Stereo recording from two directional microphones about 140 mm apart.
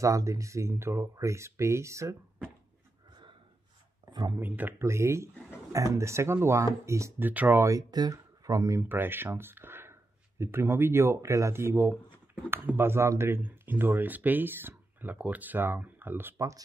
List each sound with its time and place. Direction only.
0.0 s speech: 25° right (ahead or behind)
4.1 s speech: 30° right (ahead or behind)
4.4 s speech: 15° right (ahead or behind)